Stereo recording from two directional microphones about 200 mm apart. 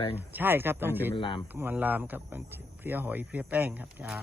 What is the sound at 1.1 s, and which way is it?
Speech, 25° left (ahead or behind).